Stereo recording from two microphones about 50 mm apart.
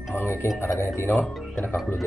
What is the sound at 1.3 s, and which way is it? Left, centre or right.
Music, centre.